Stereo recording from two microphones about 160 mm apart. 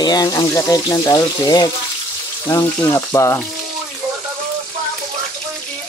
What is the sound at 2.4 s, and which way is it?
Frying, 20° left (ahead or behind).